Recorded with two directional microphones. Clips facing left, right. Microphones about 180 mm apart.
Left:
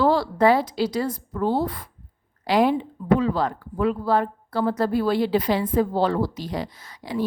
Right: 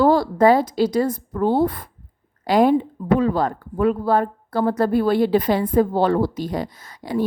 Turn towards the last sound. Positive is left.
turn(degrees=-50)  # may be behind; listen again after turning